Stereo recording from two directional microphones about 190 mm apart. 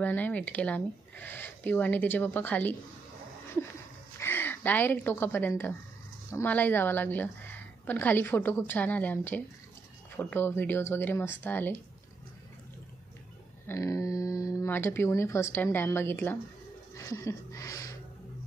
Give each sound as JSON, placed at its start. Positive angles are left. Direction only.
{"t": 0.0, "sound": "speech", "side_deg": 10}
{"t": 4.2, "sound": "a woman's voice", "side_deg": 10}
{"t": 13.7, "sound": "speech", "side_deg": 15}
{"t": 16.9, "sound": "a sound", "side_deg": 15}